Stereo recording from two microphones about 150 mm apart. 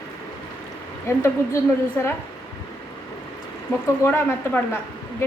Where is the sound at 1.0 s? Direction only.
20° left (ahead or behind).